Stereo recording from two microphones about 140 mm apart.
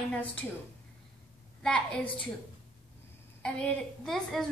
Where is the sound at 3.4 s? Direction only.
5° left (ahead or behind).